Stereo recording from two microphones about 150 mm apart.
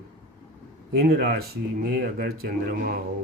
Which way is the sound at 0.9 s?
90° right.